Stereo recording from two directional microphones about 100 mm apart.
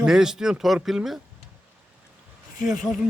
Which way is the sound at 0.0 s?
5° right (ahead or behind).